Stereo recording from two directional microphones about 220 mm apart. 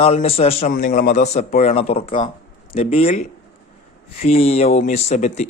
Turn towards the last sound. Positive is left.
turn(degrees=30)  # may be behind; listen again after turning